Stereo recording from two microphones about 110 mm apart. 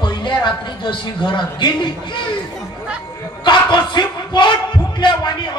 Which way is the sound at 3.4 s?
45° left (ahead or behind).